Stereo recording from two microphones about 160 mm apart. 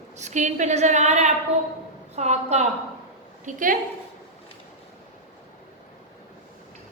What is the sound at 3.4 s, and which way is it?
Speech, 55° right (ahead or behind).